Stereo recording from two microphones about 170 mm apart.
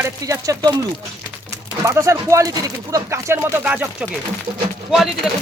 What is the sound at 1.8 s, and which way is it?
Speech, 20° right (ahead or behind).